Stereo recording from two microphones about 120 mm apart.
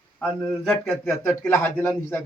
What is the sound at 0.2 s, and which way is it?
Speech, 5° left (ahead or behind).